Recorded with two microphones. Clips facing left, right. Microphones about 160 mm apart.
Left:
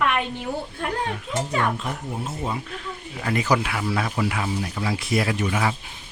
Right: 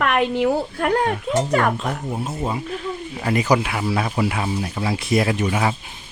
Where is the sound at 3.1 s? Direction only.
20° right (ahead or behind).